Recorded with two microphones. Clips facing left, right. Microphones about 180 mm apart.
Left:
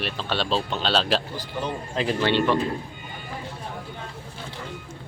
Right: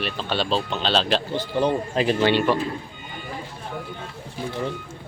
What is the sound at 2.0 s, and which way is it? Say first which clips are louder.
Speech: right 2 dB; 15° right (ahead or behind).